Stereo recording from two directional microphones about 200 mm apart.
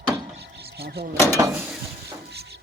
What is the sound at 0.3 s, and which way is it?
Vehicle, 55° right (ahead or behind).